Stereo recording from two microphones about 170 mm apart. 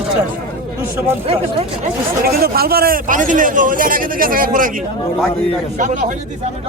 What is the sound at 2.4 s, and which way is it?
Speech, 65° right (ahead or behind).